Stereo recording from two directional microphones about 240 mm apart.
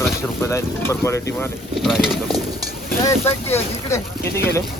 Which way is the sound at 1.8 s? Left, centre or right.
Centre.